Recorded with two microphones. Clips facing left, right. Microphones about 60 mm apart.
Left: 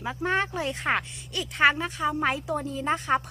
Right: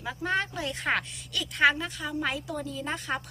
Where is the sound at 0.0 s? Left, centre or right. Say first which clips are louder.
Left 3 dB; left.